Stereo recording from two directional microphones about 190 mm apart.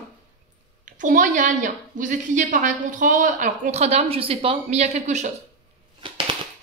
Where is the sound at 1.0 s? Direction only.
40° right (ahead or behind).